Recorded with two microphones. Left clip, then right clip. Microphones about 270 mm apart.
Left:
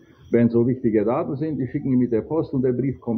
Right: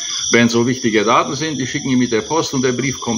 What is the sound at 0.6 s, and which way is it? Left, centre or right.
Speech, centre.